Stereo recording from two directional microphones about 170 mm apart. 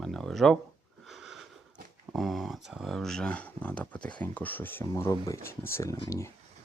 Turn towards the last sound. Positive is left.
turn(degrees=15)  # may be behind; listen again after turning